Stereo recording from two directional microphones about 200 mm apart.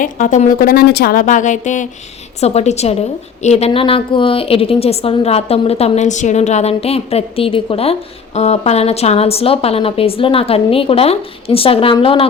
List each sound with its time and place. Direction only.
0.0 s a woman's voice: 40° left (ahead or behind)